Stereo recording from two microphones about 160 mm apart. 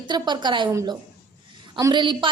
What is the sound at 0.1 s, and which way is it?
Speech, 30° right (ahead or behind).